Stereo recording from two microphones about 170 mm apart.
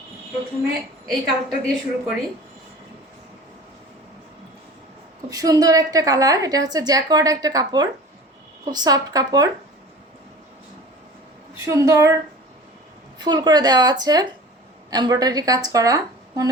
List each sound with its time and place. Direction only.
1.0 s a woman's voice: centre (ahead or behind)
5.3 s a woman's voice: 20° right (ahead or behind)
11.7 s a woman's voice: 20° right (ahead or behind)
13.1 s a woman's voice: 25° right (ahead or behind)